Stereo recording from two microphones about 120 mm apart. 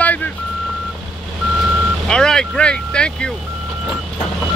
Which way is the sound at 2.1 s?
5° left (ahead or behind).